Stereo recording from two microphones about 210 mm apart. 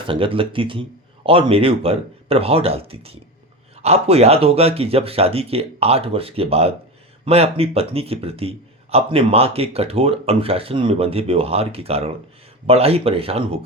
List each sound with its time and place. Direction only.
0.0 s a man's voice: 25° right (ahead or behind)